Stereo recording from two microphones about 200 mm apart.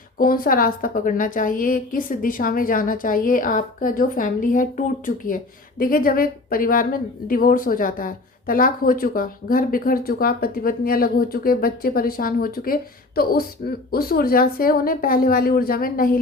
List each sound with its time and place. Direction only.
0.2 s a woman's voice: 45° left (ahead or behind)